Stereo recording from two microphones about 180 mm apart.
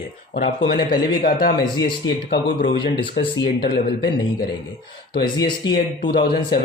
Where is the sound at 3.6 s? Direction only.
65° left (ahead or behind).